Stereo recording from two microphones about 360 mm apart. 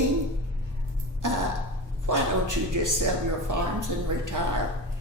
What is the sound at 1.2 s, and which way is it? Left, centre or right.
Speech, right.